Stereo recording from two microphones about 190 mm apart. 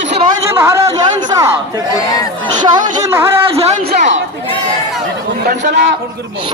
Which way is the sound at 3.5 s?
35° right (ahead or behind).